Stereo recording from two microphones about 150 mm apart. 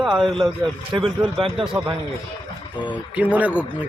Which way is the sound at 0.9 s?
35° right (ahead or behind).